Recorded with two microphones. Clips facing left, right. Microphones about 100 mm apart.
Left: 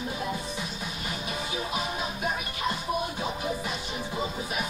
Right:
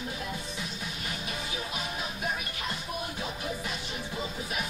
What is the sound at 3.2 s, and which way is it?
Music, 15° left (ahead or behind).